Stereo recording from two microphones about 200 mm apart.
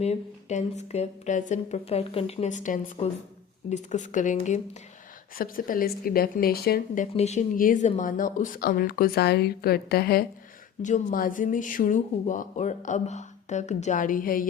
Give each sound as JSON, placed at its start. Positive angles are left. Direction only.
{"t": 0.0, "sound": "speech", "side_deg": 35}
{"t": 7.1, "sound": "speech", "side_deg": 35}